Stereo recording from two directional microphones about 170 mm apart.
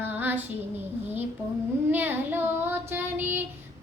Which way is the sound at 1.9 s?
10° right (ahead or behind).